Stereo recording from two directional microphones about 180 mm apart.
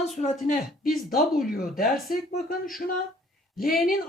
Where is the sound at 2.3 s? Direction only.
55° left (ahead or behind).